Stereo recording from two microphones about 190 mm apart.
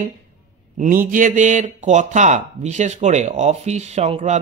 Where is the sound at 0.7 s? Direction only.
45° right (ahead or behind).